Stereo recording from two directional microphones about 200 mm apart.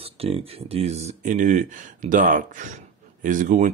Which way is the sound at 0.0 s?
30° right (ahead or behind).